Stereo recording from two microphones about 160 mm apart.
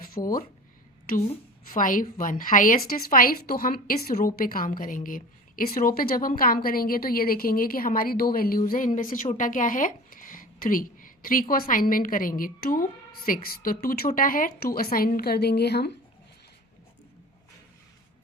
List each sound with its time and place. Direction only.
0.2 s speech: 25° left (ahead or behind)
1.7 s a woman's voice: 55° left (ahead or behind); by 16.0 s 90° left